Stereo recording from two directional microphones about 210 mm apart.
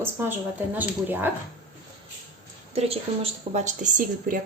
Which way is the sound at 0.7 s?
10° right (ahead or behind).